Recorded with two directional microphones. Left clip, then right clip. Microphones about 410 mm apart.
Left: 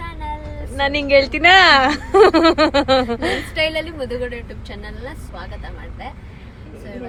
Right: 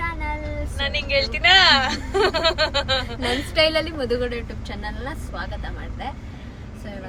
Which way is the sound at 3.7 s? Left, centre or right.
Centre.